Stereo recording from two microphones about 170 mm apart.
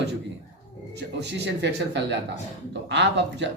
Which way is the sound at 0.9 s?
90° right.